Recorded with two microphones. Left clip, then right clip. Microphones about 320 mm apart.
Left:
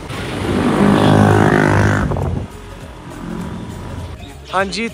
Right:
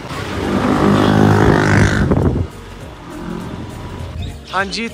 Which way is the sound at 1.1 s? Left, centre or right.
Left.